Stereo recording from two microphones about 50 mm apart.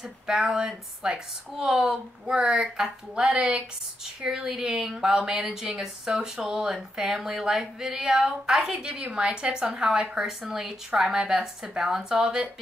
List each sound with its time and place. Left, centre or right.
0.0 s a woman's voice: centre
3.3 s speech: right
4.0 s a woman's voice: centre